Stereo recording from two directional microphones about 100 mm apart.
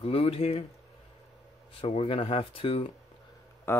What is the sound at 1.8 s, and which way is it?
Speech, 65° left (ahead or behind).